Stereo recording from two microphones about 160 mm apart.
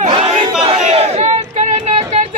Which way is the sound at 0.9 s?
45° right (ahead or behind).